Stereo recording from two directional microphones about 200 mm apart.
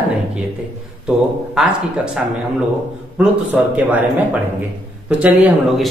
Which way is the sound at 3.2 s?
5° right (ahead or behind).